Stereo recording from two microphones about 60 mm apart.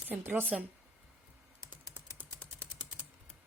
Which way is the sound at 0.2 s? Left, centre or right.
Right.